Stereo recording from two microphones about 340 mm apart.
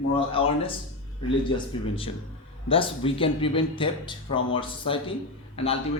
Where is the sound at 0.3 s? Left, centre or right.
Centre.